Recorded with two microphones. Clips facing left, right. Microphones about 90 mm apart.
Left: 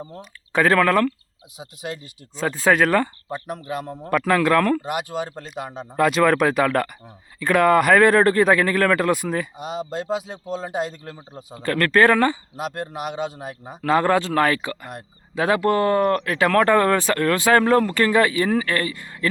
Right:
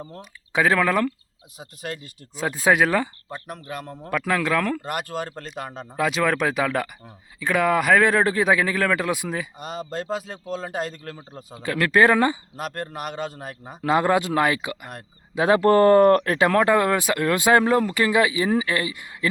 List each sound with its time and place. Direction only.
0.2 s speech: 5° right (ahead or behind)
2.3 s speech: 10° right (ahead or behind)
3.3 s speech: 25° left (ahead or behind)
4.0 s speech: centre (ahead or behind)
9.6 s a man's voice: 10° left (ahead or behind)
10.3 s speech: 25° left (ahead or behind)
10.7 s a man's voice: 10° left (ahead or behind)
11.5 s speech: 5° right (ahead or behind)
12.5 s a man's voice: 15° left (ahead or behind)
13.8 s speech: 15° right (ahead or behind)
15.4 s speech: 25° right (ahead or behind)
16.4 s speech: 15° right (ahead or behind)